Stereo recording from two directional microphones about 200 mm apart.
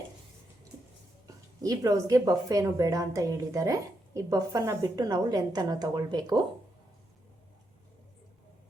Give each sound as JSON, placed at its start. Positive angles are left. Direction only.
{"t": 1.6, "sound": "a woman's voice", "side_deg": -15}